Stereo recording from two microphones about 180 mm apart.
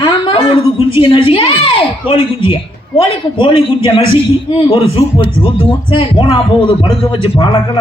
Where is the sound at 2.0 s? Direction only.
30° left (ahead or behind).